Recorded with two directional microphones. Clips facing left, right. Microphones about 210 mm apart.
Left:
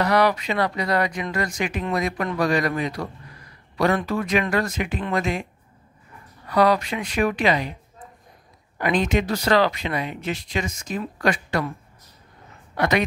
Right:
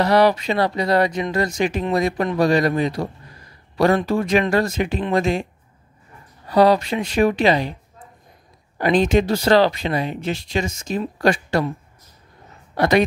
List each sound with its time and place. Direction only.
0.0 s speech: 30° right (ahead or behind)
8.7 s speech: 30° right (ahead or behind)
12.7 s a woman's voice: 30° right (ahead or behind)